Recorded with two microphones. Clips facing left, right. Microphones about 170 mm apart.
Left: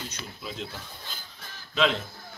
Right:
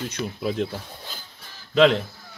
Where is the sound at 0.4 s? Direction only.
55° right (ahead or behind).